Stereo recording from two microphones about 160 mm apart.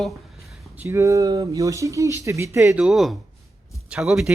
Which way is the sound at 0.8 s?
20° right (ahead or behind).